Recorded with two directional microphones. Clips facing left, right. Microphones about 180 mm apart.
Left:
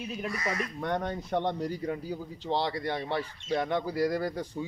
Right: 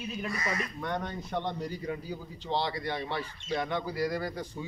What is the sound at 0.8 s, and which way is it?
Speech, 50° left (ahead or behind).